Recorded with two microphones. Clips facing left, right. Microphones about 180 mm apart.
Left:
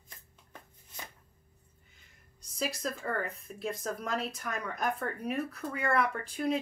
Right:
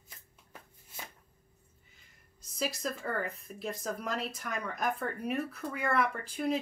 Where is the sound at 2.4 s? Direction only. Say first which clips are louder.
Even; centre (ahead or behind).